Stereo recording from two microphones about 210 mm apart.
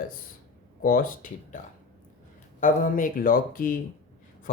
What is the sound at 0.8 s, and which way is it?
Speech, 40° left (ahead or behind).